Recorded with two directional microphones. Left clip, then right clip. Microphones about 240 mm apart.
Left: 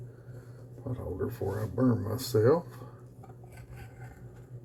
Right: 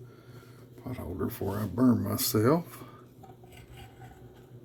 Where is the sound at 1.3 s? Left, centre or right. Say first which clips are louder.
Even; right.